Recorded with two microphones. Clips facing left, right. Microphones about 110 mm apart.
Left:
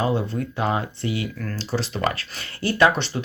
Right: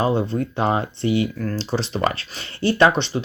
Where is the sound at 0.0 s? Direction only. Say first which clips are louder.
Right 3 dB; 30° right (ahead or behind).